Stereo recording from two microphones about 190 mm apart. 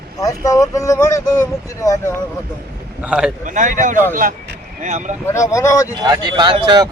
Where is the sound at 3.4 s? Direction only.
40° right (ahead or behind).